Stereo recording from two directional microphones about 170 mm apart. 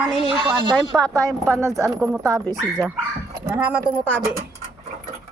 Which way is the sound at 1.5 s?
20° right (ahead or behind).